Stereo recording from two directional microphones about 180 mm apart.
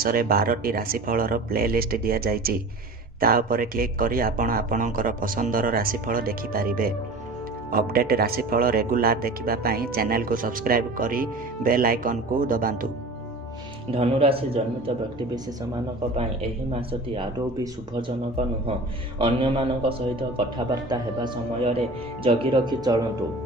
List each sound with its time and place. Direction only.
0.0 s speech: 55° right (ahead or behind)
13.9 s speech: 35° right (ahead or behind)
18.7 s a man's voice: 25° right (ahead or behind)